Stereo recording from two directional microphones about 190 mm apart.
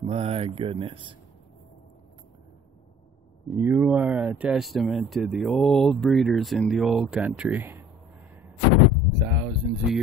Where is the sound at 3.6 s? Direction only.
10° right (ahead or behind).